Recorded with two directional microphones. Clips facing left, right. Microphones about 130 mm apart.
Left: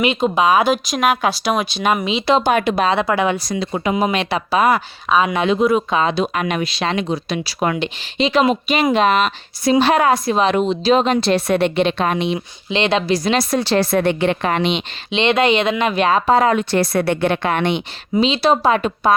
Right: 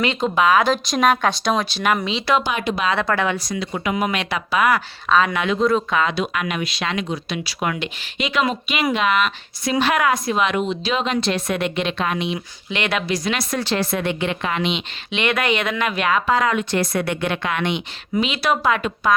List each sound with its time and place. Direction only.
0.0 s speech: 15° left (ahead or behind)
0.9 s speech: 5° left (ahead or behind); by 2.4 s 20° left (ahead or behind)
2.4 s speech: 55° left (ahead or behind)
2.9 s speech: 15° left (ahead or behind)
3.3 s speech: 30° left (ahead or behind)
5.0 s speech: 15° left (ahead or behind)
5.5 s speech: 15° left (ahead or behind)
6.0 s speech: 25° left (ahead or behind)